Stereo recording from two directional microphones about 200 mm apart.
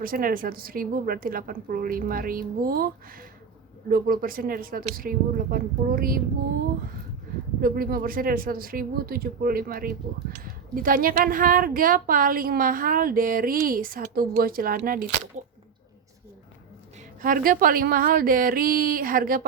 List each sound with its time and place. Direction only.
0.0 s speech: 45° right (ahead or behind)
7.6 s speech: 45° right (ahead or behind)
17.2 s speech: 45° right (ahead or behind)